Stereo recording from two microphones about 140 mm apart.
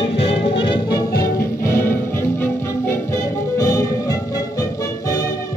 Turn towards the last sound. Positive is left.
turn(degrees=25)  # may be behind; listen again after turning